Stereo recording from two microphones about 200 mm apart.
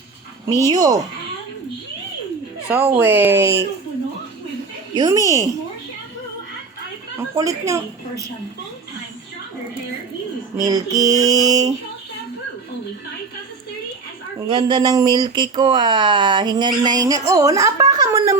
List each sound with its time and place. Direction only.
0.7 s speech: 20° right (ahead or behind)
2.6 s speech: 10° right (ahead or behind)
3.0 s mantra: 10° right (ahead or behind)
4.9 s mantra: 15° right (ahead or behind)
7.3 s mantra: 15° right (ahead or behind)
10.6 s mantra: 20° right (ahead or behind)
14.4 s speech: 20° right (ahead or behind)